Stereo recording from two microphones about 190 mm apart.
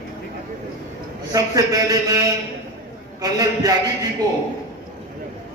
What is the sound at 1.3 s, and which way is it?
A man's voice, 20° right (ahead or behind).